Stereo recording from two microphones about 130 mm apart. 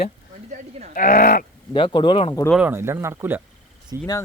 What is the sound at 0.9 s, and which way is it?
Speech, 90° left.